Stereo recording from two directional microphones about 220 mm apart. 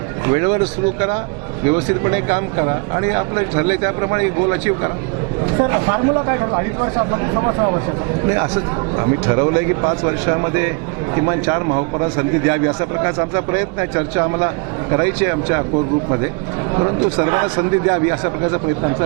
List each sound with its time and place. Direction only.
0.3 s speech: 20° right (ahead or behind)
1.7 s speech: 15° right (ahead or behind)
9.0 s speech: 25° right (ahead or behind)
11.7 s speech: 25° right (ahead or behind)
16.7 s speech: 25° right (ahead or behind)